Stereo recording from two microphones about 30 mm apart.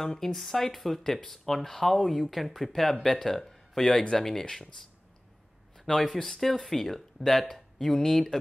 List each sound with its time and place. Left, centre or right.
0.0 s speech: centre
5.9 s speech: centre
8.0 s speech: centre